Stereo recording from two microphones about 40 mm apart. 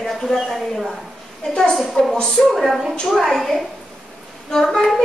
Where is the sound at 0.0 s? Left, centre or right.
Centre.